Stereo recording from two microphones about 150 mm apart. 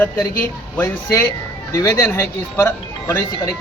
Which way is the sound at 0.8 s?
20° left (ahead or behind).